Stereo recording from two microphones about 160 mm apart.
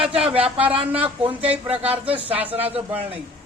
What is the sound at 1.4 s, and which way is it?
A man's voice, 10° right (ahead or behind).